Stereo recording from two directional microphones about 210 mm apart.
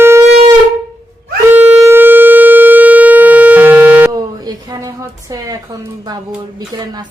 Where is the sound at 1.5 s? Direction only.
10° right (ahead or behind).